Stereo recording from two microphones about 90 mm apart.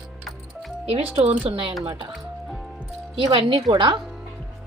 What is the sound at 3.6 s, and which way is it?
Speech, 50° right (ahead or behind).